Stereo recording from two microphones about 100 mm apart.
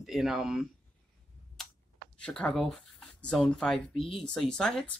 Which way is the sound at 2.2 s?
10° left (ahead or behind).